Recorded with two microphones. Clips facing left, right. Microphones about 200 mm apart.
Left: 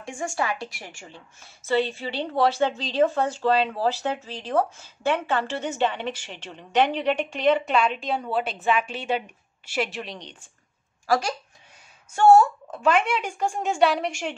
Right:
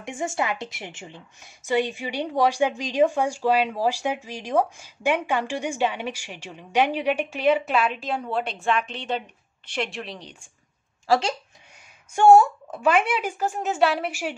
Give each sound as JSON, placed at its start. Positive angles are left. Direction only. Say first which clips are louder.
{"t": 0.0, "sound": "a woman's voice", "louder": "right 1 dB", "side_deg": -20}
{"t": 11.1, "sound": "speech", "louder": "right 2 dB", "side_deg": -25}
{"t": 12.2, "sound": "a woman's voice", "louder": "right 1 dB", "side_deg": -10}